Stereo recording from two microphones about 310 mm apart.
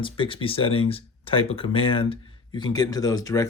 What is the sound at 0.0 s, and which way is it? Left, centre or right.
Speech, centre.